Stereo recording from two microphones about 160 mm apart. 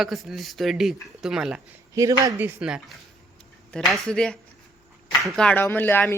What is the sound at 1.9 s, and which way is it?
Speech, 20° right (ahead or behind).